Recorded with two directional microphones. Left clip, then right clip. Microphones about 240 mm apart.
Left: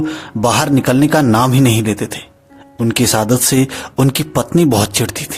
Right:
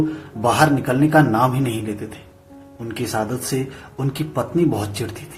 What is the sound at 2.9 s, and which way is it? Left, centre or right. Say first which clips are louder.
A man's voice: left 9 dB; left.